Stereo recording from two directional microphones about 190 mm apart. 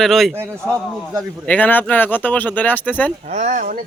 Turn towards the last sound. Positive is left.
turn(degrees=-45)  # may be behind; listen again after turning